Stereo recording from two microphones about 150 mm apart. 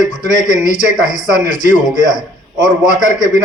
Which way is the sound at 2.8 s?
55° left (ahead or behind).